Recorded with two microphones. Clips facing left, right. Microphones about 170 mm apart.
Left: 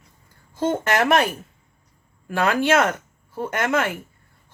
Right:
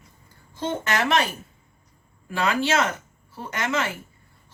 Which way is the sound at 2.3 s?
55° left (ahead or behind).